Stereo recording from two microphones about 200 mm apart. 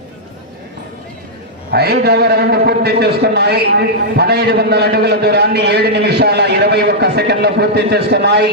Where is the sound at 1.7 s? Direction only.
55° right (ahead or behind).